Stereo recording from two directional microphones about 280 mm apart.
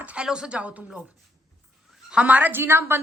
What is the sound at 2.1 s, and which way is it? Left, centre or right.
Speech, centre.